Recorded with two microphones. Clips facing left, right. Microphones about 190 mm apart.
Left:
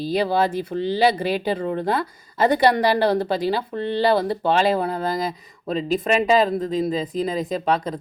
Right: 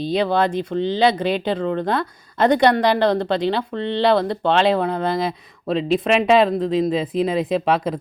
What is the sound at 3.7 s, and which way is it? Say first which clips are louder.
Speech: right 1 dB; 70° right (ahead or behind).